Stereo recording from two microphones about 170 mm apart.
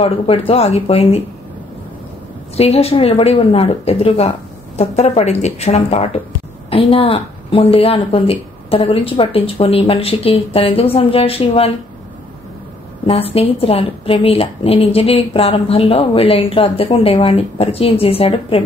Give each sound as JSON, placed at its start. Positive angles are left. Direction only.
{"t": 0.0, "sound": "a woman's voice", "side_deg": 35}
{"t": 2.5, "sound": "a woman's voice", "side_deg": 35}
{"t": 13.0, "sound": "a woman's voice", "side_deg": 35}